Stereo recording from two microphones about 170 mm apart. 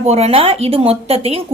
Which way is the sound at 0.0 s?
40° right (ahead or behind).